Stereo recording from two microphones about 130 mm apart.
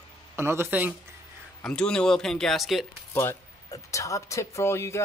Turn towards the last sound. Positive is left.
turn(degrees=20)  # may be behind; listen again after turning